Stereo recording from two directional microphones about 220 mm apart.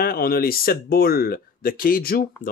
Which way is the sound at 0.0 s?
45° left (ahead or behind).